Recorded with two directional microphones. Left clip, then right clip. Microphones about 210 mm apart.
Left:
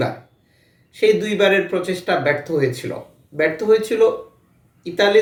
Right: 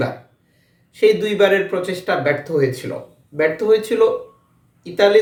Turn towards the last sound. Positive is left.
turn(degrees=-5)  # may be behind; listen again after turning